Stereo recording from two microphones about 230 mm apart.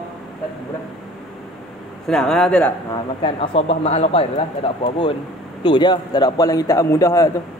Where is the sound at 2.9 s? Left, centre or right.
Left.